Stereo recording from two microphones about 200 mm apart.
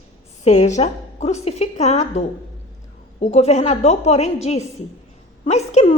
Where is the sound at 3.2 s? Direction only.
30° left (ahead or behind).